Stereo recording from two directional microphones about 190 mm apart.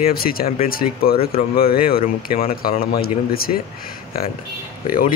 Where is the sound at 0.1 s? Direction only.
50° left (ahead or behind).